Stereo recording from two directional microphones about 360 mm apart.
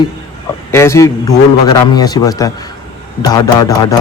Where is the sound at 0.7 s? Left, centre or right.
Centre.